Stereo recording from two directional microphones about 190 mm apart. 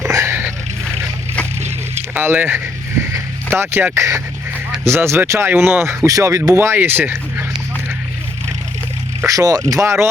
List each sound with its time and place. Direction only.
0.0 s a sound: 15° right (ahead or behind)
2.1 s speech: 10° right (ahead or behind)
3.1 s music: 10° right (ahead or behind)
4.9 s speech: 15° right (ahead or behind)
9.2 s speech: 20° right (ahead or behind)